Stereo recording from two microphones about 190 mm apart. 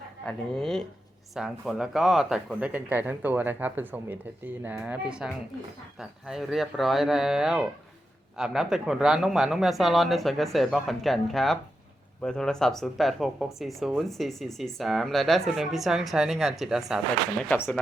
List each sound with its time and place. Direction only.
0.3 s speech: centre (ahead or behind)